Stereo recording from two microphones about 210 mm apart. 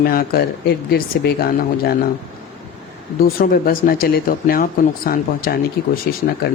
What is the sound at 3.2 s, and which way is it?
Speech, 45° left (ahead or behind).